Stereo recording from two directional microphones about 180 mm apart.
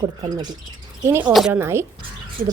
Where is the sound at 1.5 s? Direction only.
15° right (ahead or behind).